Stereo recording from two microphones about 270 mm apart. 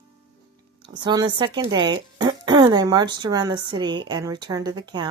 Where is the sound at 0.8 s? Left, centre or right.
Centre.